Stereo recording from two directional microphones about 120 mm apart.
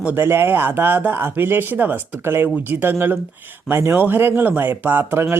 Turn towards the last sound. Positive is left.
turn(degrees=-20)  # may be behind; listen again after turning